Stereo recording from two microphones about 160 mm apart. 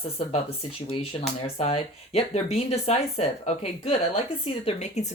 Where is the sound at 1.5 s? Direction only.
40° left (ahead or behind).